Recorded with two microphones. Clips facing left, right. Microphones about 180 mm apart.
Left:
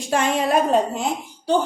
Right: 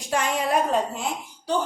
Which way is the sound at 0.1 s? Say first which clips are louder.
Left 4 dB; 25° left (ahead or behind).